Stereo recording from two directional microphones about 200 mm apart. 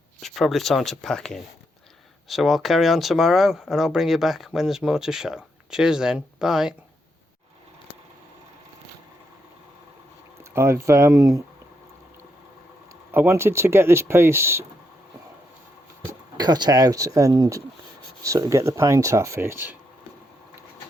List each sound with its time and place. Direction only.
0.2 s speech: centre (ahead or behind)
10.5 s speech: 15° right (ahead or behind)
13.1 s speech: 10° right (ahead or behind)
16.4 s speech: 20° right (ahead or behind)